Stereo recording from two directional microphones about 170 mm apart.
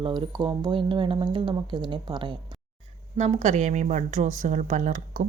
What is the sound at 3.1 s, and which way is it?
Speech, 40° right (ahead or behind).